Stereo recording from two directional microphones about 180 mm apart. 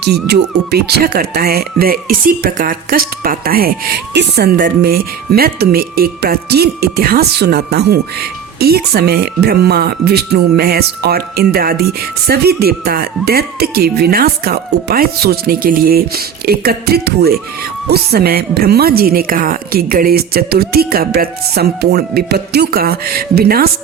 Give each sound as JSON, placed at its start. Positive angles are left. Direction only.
{"t": 0.0, "sound": "speech", "side_deg": -65}